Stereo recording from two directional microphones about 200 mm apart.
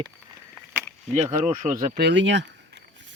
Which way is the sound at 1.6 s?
40° right (ahead or behind).